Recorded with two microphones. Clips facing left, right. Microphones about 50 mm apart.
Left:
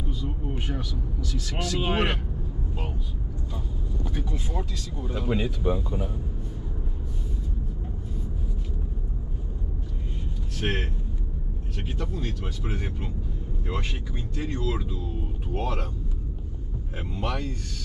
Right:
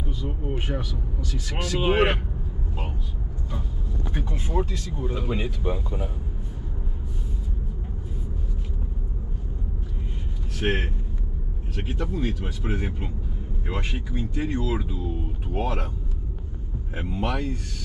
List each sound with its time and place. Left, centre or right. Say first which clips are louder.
0.5 s speech: right 5 dB; right
4.1 s speech: right 6 dB; right
5.3 s speech: left 6 dB; right
10.6 s speech: right 3 dB; centre
16.9 s speech: right 3 dB; centre